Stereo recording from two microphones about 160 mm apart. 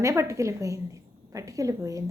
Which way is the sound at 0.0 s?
20° right (ahead or behind).